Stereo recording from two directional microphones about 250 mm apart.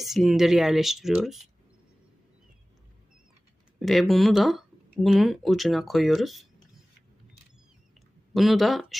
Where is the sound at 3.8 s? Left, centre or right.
Centre.